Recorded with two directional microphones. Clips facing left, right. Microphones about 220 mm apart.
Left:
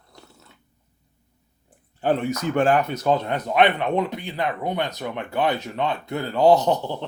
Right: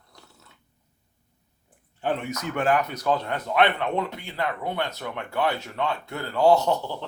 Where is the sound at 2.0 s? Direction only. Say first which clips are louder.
Left 6 dB; 35° left (ahead or behind).